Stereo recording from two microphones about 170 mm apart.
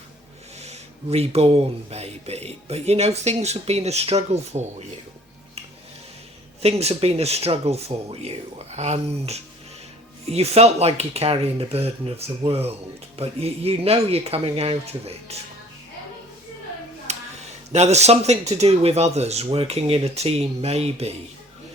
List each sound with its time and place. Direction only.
0.6 s a man's voice: 40° right (ahead or behind)
6.6 s a man's voice: 40° right (ahead or behind)
17.1 s a sound: 40° right (ahead or behind)
17.7 s a man's voice: 40° right (ahead or behind)